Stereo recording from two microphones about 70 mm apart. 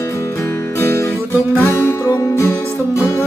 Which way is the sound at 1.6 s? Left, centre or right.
Left.